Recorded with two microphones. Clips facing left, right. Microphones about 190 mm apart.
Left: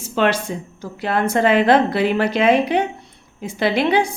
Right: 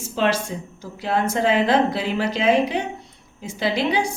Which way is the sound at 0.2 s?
65° left (ahead or behind).